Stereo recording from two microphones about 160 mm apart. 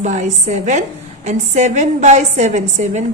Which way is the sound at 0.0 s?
50° right (ahead or behind).